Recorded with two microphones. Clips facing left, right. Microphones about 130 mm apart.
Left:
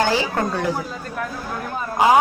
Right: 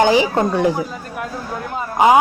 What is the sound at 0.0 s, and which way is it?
Speech, 15° right (ahead or behind).